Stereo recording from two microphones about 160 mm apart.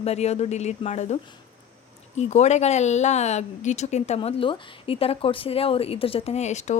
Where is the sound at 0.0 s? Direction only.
40° left (ahead or behind).